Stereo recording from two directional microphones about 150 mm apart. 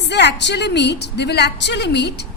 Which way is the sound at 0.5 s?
90° left.